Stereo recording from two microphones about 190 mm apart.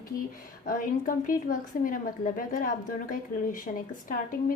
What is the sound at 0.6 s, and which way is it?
A woman's voice, 45° left (ahead or behind).